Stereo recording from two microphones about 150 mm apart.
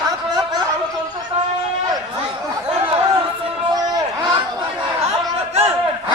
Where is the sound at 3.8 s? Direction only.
25° right (ahead or behind).